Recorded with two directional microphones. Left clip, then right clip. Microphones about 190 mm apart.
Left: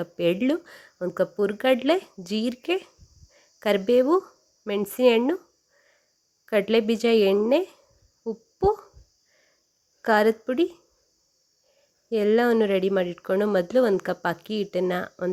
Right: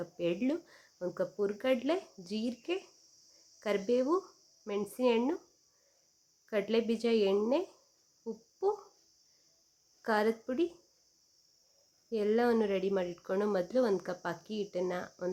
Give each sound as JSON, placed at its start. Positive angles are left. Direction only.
{"t": 0.0, "sound": "speech", "side_deg": 40}
{"t": 6.4, "sound": "speech", "side_deg": 35}
{"t": 10.0, "sound": "speech", "side_deg": 35}
{"t": 12.1, "sound": "speech", "side_deg": 35}